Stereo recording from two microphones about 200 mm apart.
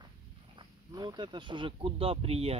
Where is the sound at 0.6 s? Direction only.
20° right (ahead or behind).